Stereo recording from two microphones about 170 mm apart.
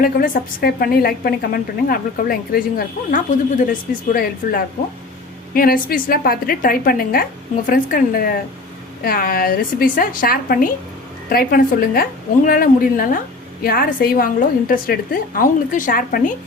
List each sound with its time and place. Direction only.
0.0 s a woman's voice: 60° left (ahead or behind)